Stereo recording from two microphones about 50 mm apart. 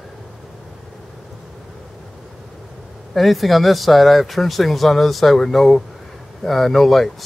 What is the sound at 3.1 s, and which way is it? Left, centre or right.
Speech, centre.